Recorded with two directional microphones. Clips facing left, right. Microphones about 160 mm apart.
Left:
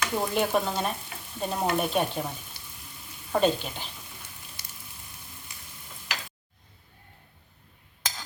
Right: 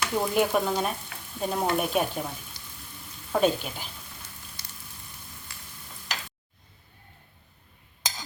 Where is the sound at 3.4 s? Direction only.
5° right (ahead or behind).